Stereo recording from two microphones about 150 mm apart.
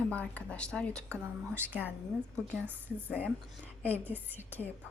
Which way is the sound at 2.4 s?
5° left (ahead or behind).